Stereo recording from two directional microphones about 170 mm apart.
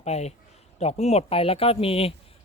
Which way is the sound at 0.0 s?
40° left (ahead or behind).